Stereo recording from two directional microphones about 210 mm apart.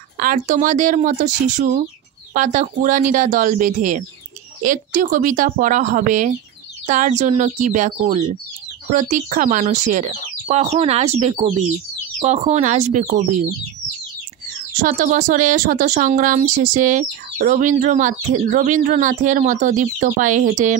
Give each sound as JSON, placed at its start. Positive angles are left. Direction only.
{"t": 0.2, "sound": "speech", "side_deg": -40}
{"t": 14.8, "sound": "speech", "side_deg": -40}